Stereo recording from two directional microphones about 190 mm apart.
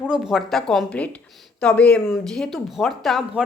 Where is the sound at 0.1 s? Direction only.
5° right (ahead or behind).